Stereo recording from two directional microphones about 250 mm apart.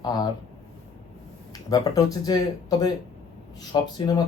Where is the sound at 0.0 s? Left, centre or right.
Centre.